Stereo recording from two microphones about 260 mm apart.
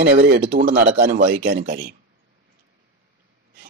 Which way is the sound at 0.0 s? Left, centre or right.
Right.